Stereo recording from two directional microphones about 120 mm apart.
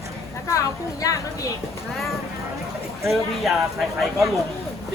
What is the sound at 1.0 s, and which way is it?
Speech, 25° left (ahead or behind).